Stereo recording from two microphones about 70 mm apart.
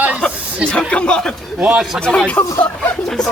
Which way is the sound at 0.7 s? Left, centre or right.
Centre.